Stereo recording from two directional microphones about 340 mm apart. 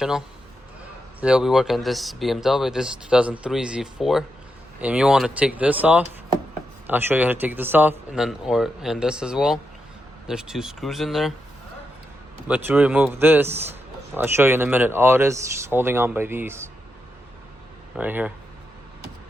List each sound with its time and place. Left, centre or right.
1.2 s speech: centre
12.5 s speech: centre
17.9 s speech: centre